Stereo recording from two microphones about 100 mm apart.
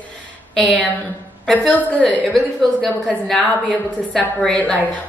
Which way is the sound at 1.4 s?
5° left (ahead or behind).